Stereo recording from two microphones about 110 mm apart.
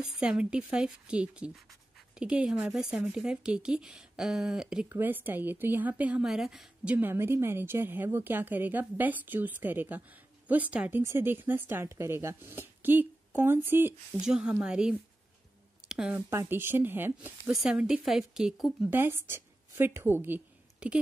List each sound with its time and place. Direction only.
0.0 s a woman's voice: 10° right (ahead or behind)
4.8 s a woman's voice: 20° right (ahead or behind)
7.0 s a woman's voice: 20° right (ahead or behind)
14.2 s a woman's voice: 5° right (ahead or behind)
16.2 s speech: 20° right (ahead or behind)
17.5 s speech: 5° right (ahead or behind)
18.8 s a woman's voice: 20° right (ahead or behind)